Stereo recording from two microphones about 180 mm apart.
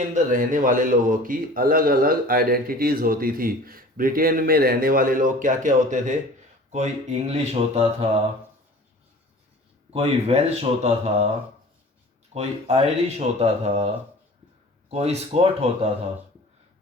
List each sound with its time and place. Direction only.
0.1 s a man's voice: 50° right (ahead or behind)
9.9 s speech: 35° right (ahead or behind)
12.3 s speech: 35° right (ahead or behind)
14.8 s speech: 35° right (ahead or behind)